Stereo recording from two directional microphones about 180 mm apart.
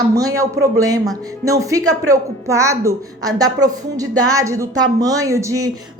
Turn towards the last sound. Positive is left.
turn(degrees=-15)  # may be behind; listen again after turning